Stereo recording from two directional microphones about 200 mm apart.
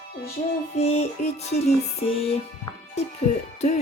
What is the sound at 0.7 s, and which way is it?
Speech, 30° left (ahead or behind).